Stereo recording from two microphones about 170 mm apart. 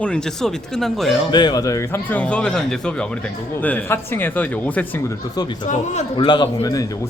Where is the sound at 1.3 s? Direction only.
25° left (ahead or behind).